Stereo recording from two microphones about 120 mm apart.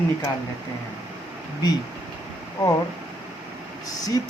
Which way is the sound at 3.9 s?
30° left (ahead or behind).